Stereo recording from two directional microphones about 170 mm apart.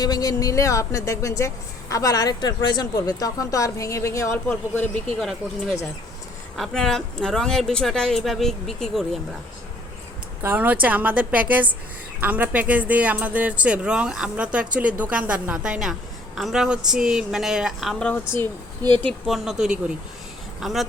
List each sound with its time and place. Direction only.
0.0 s speech: 20° left (ahead or behind)
5.2 s a woman's voice: centre (ahead or behind)
10.4 s a woman's voice: 10° right (ahead or behind)
18.3 s speech: 25° right (ahead or behind)
19.0 s a woman's voice: centre (ahead or behind)